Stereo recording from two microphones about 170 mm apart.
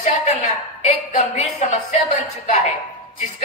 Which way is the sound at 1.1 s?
45° left (ahead or behind).